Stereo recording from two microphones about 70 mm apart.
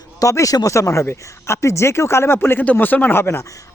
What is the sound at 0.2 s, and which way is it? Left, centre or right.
A man's voice, left.